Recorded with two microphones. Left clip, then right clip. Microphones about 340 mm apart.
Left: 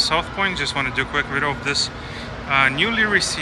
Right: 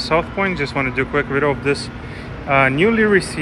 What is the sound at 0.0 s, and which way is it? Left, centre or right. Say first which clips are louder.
Speech: right 2 dB; centre.